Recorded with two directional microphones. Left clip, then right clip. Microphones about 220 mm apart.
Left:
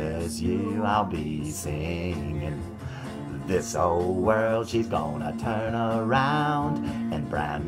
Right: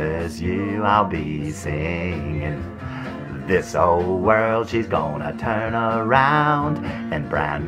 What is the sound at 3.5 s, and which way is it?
Speech, 20° right (ahead or behind).